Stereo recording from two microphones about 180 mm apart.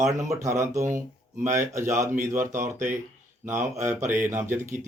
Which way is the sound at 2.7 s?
45° right (ahead or behind).